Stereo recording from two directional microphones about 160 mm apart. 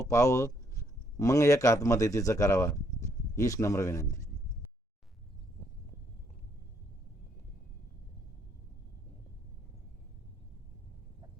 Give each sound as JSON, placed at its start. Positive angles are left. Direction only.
{"t": 0.0, "sound": "speech", "side_deg": 20}